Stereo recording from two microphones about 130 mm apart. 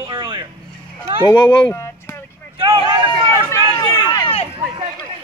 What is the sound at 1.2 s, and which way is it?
Speech, 35° left (ahead or behind).